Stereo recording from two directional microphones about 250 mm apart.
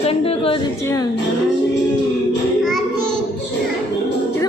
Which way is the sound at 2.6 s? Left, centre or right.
Centre.